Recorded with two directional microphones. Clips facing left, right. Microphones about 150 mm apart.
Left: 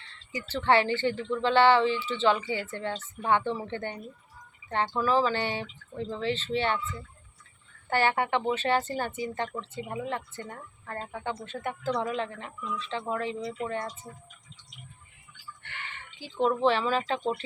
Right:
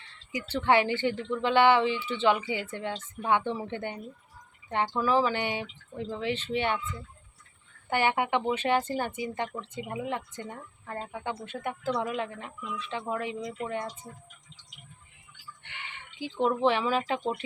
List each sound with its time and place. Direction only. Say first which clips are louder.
0.3 s speech: even; 15° right (ahead or behind)
7.9 s speech: left 1 dB; 15° right (ahead or behind)
15.6 s a sound: left 2 dB; 15° right (ahead or behind)
16.6 s speech: even; 15° right (ahead or behind)